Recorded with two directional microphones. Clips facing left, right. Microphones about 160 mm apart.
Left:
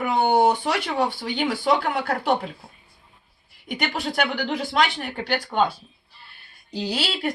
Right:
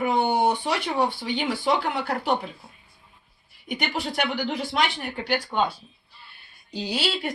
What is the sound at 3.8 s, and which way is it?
Speech, 50° left (ahead or behind).